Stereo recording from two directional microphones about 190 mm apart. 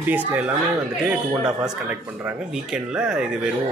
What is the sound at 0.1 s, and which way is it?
Speech, 10° right (ahead or behind).